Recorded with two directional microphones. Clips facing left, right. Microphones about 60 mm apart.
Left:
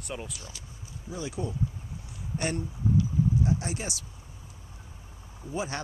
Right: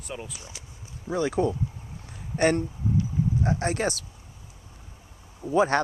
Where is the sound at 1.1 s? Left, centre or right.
Right.